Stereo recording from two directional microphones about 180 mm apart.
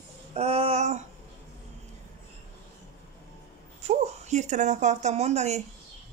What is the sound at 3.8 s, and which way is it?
Speech, 40° right (ahead or behind).